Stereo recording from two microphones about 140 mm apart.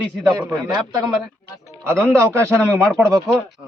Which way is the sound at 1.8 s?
20° right (ahead or behind).